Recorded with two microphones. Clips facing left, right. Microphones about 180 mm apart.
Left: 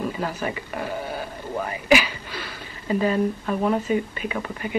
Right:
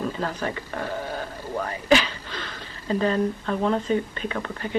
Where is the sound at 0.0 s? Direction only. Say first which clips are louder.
Left 1 dB; 10° left (ahead or behind).